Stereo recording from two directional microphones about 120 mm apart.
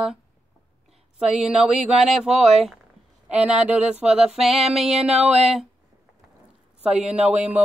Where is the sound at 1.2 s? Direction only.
5° right (ahead or behind).